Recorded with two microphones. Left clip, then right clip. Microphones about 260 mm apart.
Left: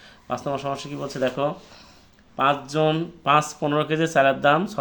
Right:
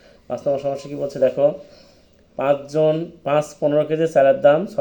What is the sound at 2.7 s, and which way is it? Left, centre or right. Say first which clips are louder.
Speech: right 4 dB; centre.